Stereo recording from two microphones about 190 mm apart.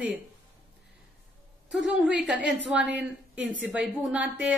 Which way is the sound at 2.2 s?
5° right (ahead or behind).